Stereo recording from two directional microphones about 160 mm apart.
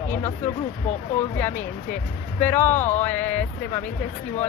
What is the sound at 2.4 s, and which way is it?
Speech, 10° left (ahead or behind).